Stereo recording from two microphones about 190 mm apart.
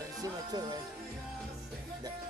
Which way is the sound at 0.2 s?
20° right (ahead or behind).